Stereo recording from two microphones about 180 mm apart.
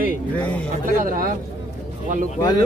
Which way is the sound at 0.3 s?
5° left (ahead or behind).